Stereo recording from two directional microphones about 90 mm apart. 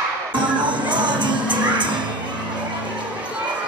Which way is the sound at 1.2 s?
60° right (ahead or behind).